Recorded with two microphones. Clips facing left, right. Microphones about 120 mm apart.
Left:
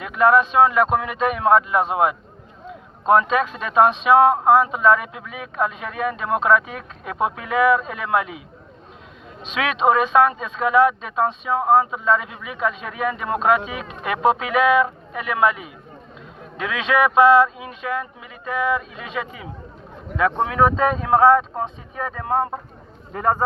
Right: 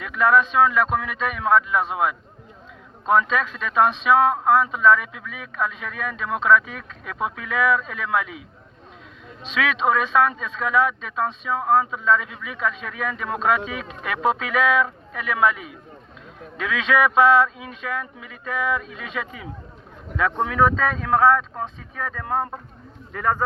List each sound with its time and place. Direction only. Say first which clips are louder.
0.0 s speech: left 3 dB; 10° left (ahead or behind)
3.1 s speech: left 3 dB; 15° left (ahead or behind)
9.4 s speech: left 2 dB; 15° left (ahead or behind)
23.1 s speech: left 3 dB; 30° left (ahead or behind)